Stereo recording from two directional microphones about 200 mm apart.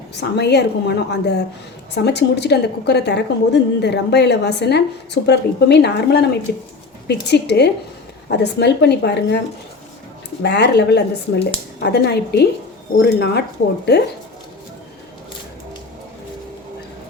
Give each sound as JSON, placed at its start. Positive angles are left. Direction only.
{"t": 0.2, "sound": "a woman's voice", "side_deg": 55}
{"t": 10.4, "sound": "a woman's voice", "side_deg": 55}